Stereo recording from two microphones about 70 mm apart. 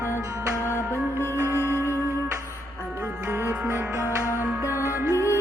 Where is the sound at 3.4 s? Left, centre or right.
Right.